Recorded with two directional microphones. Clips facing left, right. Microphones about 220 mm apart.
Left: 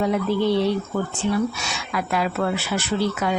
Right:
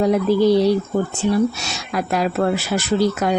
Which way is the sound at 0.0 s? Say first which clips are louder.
Right 5 dB; 40° right (ahead or behind).